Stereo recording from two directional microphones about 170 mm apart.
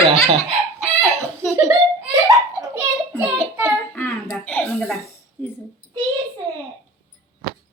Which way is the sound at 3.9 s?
15° left (ahead or behind).